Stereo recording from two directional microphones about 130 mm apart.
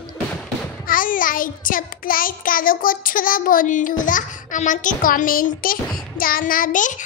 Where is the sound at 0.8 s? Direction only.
90° left.